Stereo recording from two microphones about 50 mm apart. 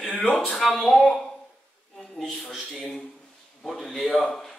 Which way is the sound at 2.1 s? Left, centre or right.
Centre.